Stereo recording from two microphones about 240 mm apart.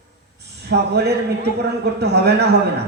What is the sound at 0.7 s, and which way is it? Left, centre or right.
A man's voice, right.